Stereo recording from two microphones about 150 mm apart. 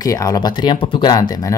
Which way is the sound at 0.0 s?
20° left (ahead or behind).